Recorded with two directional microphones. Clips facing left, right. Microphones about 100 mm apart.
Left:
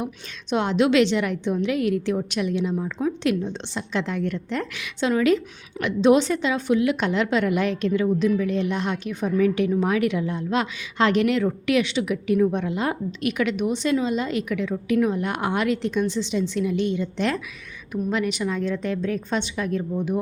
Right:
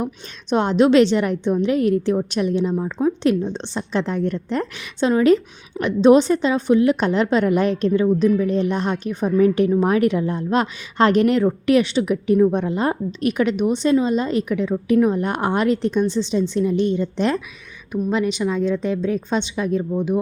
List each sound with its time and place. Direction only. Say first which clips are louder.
0.5 s a woman's voice: right 5 dB; 40° right (ahead or behind); by 20.1 s 25° right (ahead or behind)